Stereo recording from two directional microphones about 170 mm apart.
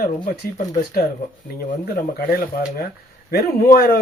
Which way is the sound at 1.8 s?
60° left (ahead or behind).